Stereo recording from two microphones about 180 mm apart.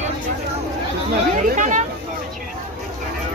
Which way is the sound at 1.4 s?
45° right (ahead or behind).